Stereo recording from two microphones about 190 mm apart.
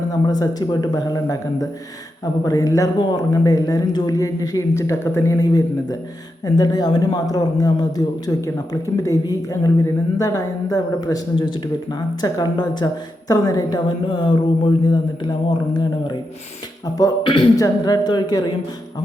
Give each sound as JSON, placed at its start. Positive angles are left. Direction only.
{"t": 0.1, "sound": "speech", "side_deg": 20}